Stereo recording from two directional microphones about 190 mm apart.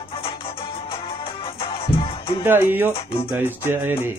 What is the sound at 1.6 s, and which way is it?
Music, 30° left (ahead or behind).